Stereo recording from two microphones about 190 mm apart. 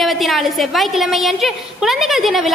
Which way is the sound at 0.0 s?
Centre (ahead or behind).